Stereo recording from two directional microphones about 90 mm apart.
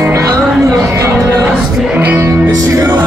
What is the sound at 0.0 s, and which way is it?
Music, 35° right (ahead or behind).